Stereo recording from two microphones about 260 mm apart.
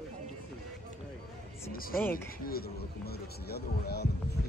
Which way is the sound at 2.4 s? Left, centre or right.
Left.